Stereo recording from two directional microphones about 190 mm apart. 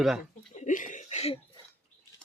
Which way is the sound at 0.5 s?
40° left (ahead or behind).